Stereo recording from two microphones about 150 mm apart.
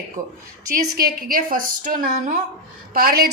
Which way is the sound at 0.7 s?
75° right (ahead or behind).